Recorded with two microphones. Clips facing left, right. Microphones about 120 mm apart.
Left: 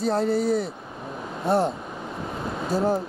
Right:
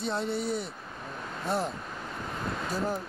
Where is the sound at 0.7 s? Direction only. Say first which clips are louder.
Left 5 dB; 10° left (ahead or behind).